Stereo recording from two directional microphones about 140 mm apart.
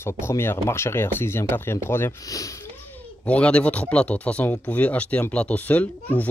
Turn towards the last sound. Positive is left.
turn(degrees=10)  # may be behind; listen again after turning